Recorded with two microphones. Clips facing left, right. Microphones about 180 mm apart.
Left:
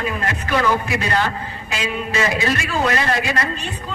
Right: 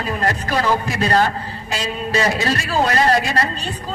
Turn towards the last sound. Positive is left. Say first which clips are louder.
# right 4 dB
turn(degrees=-35)  # may be behind; listen again after turning